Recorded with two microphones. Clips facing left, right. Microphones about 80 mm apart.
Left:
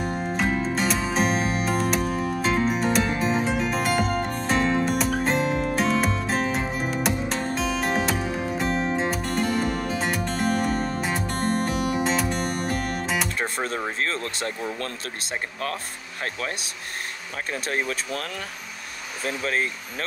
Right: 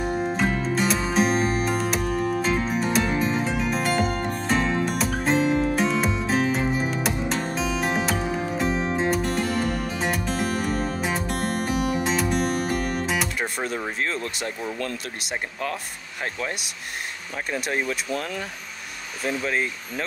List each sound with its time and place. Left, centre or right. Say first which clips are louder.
0.0 s music: right 2 dB; centre
13.6 s a sound: even; left
14.4 s speech: even; left
17.5 s speech: right 1 dB; right